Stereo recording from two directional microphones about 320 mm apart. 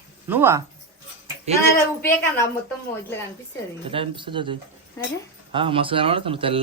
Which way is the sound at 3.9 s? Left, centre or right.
Centre.